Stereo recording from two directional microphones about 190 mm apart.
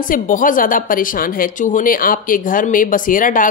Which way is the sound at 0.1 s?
45° left (ahead or behind).